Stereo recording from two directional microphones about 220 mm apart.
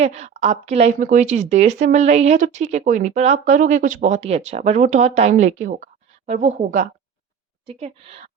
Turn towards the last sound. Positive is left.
turn(degrees=-30)  # may be behind; listen again after turning